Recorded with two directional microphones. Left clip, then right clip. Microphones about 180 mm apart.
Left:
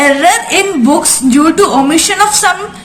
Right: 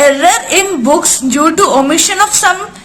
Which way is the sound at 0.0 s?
45° right (ahead or behind).